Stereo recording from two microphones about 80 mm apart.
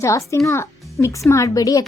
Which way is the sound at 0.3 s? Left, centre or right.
Left.